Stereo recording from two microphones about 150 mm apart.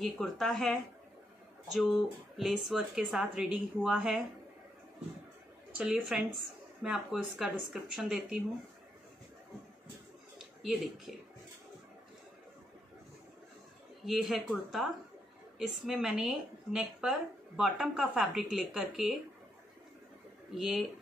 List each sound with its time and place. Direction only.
0.0 s speech: 5° left (ahead or behind)
5.8 s speech: 5° right (ahead or behind)
10.6 s speech: centre (ahead or behind)
14.0 s speech: centre (ahead or behind)
20.5 s speech: 5° right (ahead or behind)